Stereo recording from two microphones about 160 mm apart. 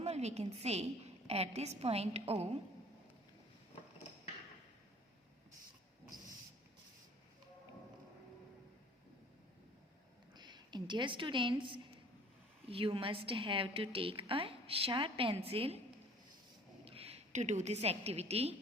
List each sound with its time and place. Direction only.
0.0 s a woman's voice: 45° right (ahead or behind)
10.3 s a woman's voice: 25° right (ahead or behind)
16.8 s a woman's voice: 35° right (ahead or behind)